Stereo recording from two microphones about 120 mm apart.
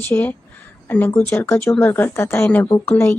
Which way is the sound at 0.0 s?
15° left (ahead or behind).